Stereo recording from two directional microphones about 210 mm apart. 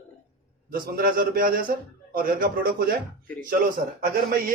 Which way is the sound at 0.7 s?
45° right (ahead or behind).